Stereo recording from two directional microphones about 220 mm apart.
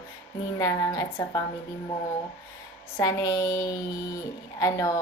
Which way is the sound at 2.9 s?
15° left (ahead or behind).